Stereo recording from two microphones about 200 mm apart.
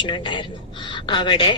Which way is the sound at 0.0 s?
25° left (ahead or behind).